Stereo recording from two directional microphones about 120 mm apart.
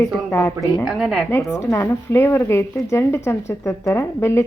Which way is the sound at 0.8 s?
5° right (ahead or behind).